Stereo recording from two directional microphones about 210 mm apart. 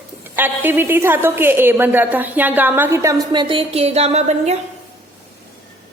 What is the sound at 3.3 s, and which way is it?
A woman's voice, 25° right (ahead or behind).